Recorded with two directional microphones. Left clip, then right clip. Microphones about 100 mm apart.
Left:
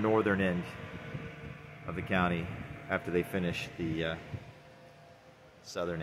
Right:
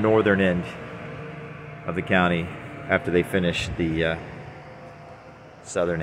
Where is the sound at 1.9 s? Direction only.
10° right (ahead or behind).